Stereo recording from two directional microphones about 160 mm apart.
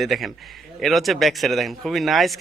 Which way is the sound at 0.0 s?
Centre (ahead or behind).